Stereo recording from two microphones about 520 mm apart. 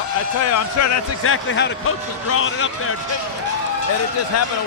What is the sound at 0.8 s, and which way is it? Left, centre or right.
Speech, left.